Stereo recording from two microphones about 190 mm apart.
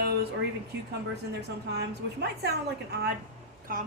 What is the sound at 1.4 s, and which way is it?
A woman's voice, 60° right (ahead or behind).